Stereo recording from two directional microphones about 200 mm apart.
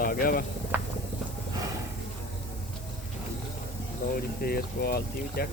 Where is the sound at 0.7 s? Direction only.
10° right (ahead or behind).